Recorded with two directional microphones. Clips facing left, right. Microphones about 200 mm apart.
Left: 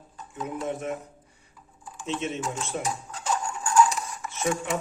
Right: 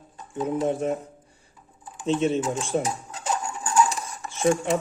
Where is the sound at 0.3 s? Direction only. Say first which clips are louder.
Right 7 dB; 30° right (ahead or behind).